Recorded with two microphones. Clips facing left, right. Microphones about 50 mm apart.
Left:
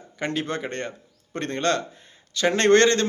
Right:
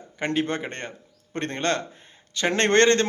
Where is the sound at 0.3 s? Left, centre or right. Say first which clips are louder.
Right 2 dB; right.